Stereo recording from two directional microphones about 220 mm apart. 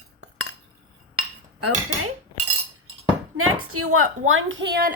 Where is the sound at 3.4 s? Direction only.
80° right; by 4.9 s 50° right (ahead or behind).